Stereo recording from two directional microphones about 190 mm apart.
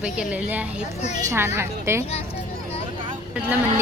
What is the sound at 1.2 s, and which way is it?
Speech, 15° right (ahead or behind).